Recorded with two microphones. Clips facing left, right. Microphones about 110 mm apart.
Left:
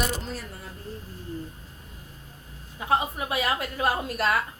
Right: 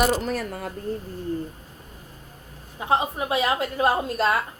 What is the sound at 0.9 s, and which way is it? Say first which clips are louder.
Speech: right 10 dB; 55° right (ahead or behind).